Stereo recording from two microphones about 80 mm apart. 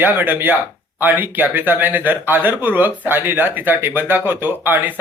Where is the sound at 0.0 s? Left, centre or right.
Right.